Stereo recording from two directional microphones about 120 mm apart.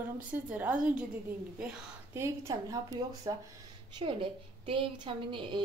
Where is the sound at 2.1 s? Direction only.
25° right (ahead or behind).